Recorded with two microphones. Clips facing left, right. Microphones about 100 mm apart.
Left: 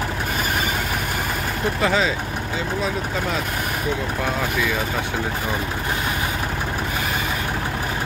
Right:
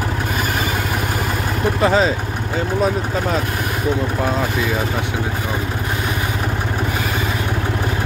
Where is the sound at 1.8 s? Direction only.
35° right (ahead or behind).